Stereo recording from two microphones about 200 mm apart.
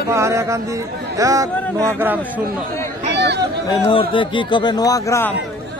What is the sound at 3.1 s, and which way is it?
Chatter, 55° right (ahead or behind).